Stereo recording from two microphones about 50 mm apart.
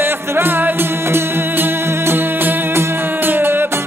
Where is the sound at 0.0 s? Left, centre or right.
Right.